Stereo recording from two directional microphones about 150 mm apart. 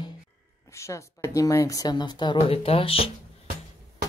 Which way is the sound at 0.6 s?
20° left (ahead or behind).